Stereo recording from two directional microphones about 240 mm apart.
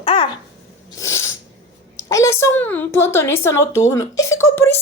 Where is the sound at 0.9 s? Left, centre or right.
Centre.